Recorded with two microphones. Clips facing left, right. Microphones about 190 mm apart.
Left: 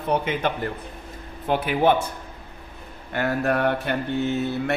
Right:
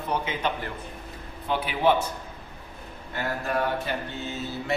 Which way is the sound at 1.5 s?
50° left (ahead or behind).